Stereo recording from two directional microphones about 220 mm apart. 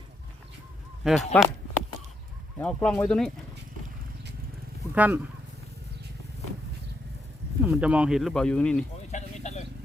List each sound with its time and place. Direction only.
1.0 s speech: centre (ahead or behind)
2.6 s speech: 5° left (ahead or behind)
4.9 s speech: 10° right (ahead or behind)
7.6 s speech: 5° right (ahead or behind)
9.0 s a sound: 30° left (ahead or behind)